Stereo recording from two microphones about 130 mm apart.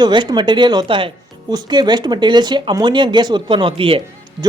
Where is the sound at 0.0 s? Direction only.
35° right (ahead or behind).